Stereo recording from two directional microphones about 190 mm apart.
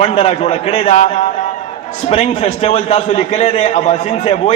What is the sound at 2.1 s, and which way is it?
A man's voice, 35° left (ahead or behind).